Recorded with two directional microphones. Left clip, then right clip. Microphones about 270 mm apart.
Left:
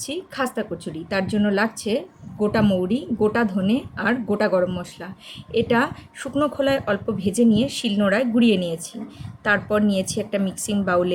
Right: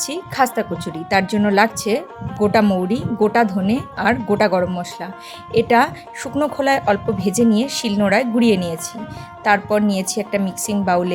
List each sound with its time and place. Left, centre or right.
0.0 s speech: right